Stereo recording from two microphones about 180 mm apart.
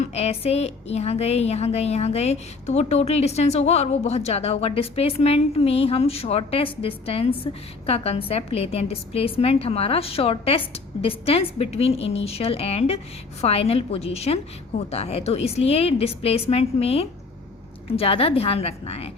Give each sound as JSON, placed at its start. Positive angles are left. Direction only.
{"t": 0.0, "sound": "a woman's voice", "side_deg": 35}